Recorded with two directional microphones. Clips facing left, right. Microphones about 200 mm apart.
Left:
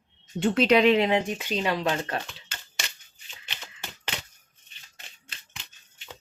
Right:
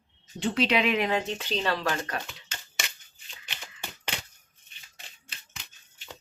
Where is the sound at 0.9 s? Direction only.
20° left (ahead or behind).